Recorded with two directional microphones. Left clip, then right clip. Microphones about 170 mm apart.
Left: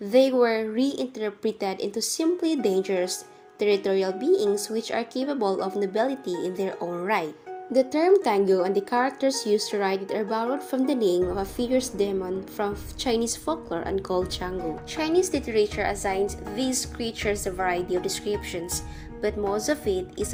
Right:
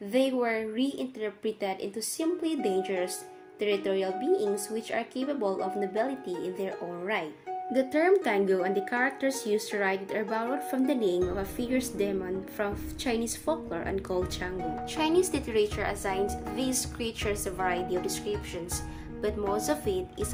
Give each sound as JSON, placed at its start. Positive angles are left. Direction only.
{"t": 0.1, "sound": "a woman's voice", "side_deg": 15}
{"t": 4.3, "sound": "speech", "side_deg": 0}
{"t": 4.8, "sound": "a woman's voice", "side_deg": 15}
{"t": 7.7, "sound": "a woman's voice", "side_deg": 10}